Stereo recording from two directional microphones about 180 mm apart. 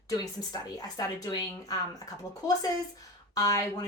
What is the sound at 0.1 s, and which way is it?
A woman's voice, 20° left (ahead or behind).